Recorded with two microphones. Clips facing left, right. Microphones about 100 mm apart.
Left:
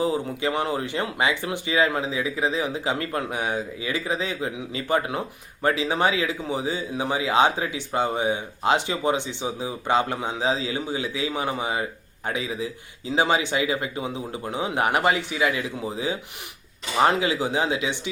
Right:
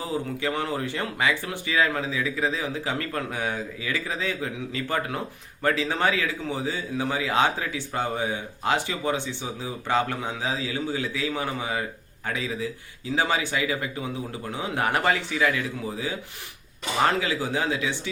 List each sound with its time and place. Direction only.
0.0 s speech: 20° left (ahead or behind)